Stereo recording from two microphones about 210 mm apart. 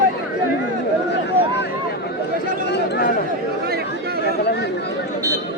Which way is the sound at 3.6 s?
45° right (ahead or behind).